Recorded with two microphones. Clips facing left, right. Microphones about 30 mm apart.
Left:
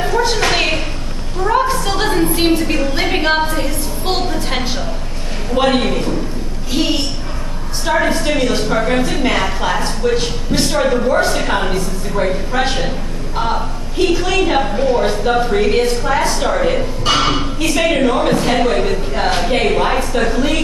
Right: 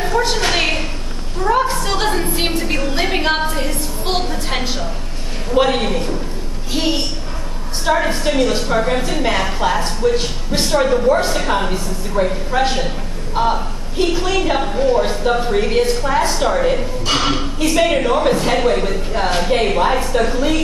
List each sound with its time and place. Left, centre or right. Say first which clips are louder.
0.1 s a sound: left 1 dB; centre
5.7 s a woman's voice: left 3 dB; centre
6.7 s a sound: left 2 dB; centre
7.8 s a woman's voice: left 1 dB; centre
8.6 s a woman's voice: left 2 dB; centre
12.5 s a woman's voice: even; centre
14.3 s a woman's voice: left 2 dB; centre
18.7 s a woman's voice: left 1 dB; left